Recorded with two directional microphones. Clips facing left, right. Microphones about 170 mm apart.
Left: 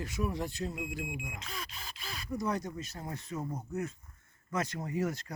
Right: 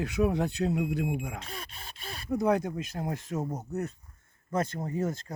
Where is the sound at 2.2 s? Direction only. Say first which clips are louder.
Right 8 dB; 60° right (ahead or behind); by 3.3 s 75° right (ahead or behind).